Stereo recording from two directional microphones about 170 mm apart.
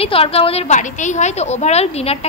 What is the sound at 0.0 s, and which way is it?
A woman's voice, 35° left (ahead or behind).